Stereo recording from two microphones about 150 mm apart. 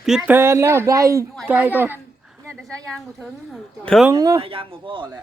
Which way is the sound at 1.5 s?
10° right (ahead or behind).